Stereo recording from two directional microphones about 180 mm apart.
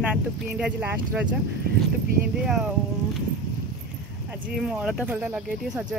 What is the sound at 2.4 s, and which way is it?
Speech, centre (ahead or behind).